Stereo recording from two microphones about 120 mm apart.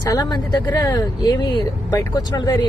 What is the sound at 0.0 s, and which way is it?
Speech, 30° left (ahead or behind).